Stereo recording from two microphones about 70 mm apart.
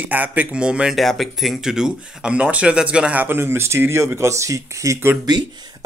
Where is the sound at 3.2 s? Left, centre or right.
Right.